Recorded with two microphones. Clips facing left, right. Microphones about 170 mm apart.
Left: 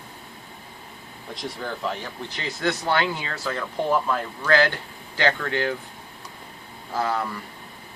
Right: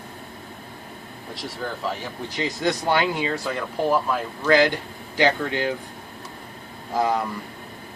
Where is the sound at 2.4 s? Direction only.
15° right (ahead or behind).